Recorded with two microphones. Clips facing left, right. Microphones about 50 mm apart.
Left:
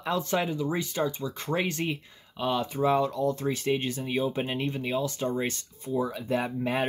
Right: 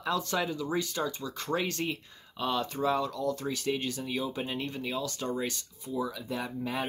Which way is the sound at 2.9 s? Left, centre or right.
Left.